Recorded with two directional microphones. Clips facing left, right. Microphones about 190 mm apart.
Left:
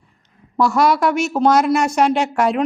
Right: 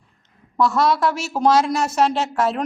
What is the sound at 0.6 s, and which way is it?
A woman's voice, centre (ahead or behind).